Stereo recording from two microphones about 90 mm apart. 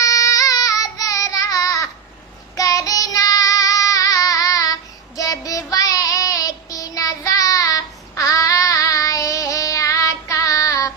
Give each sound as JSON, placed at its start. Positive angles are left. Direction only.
{"t": 0.0, "sound": "child singing", "side_deg": 40}